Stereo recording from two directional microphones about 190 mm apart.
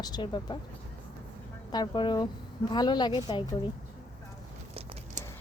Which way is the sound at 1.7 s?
25° left (ahead or behind).